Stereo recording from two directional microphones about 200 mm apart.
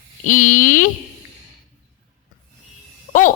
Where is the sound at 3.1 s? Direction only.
45° left (ahead or behind).